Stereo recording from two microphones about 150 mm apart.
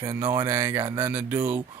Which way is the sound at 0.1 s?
15° right (ahead or behind).